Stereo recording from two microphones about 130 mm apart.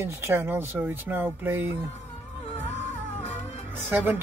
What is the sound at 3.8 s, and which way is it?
Speech, 15° right (ahead or behind).